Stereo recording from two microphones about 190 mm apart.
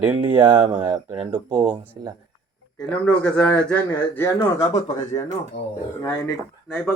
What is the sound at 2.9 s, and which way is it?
Speech, 10° left (ahead or behind).